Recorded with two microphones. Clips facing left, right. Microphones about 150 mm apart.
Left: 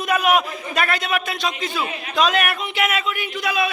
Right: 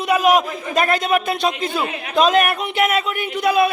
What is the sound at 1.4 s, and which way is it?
A man's voice, 55° right (ahead or behind).